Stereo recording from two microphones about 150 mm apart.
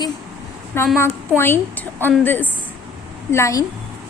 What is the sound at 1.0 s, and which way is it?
A woman's voice, 15° left (ahead or behind).